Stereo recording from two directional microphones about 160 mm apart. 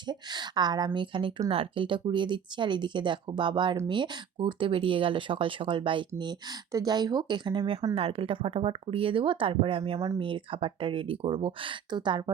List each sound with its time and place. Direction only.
0.1 s speech: 25° right (ahead or behind)